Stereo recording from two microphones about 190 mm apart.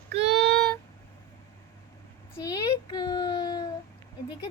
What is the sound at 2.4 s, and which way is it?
A woman's voice, 15° left (ahead or behind).